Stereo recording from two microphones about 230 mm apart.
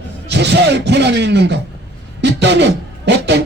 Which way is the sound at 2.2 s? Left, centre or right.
Right.